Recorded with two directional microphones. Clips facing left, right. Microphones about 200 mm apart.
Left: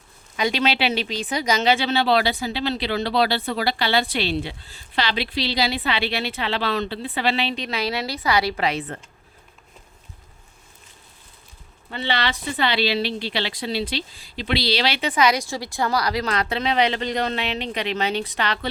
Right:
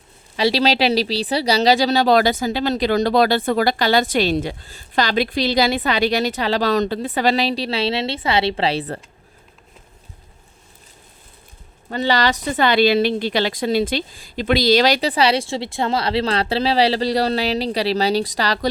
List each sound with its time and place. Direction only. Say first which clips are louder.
0.3 s speech: right 5 dB; 35° right (ahead or behind)
11.9 s a woman's voice: right 7 dB; 40° right (ahead or behind)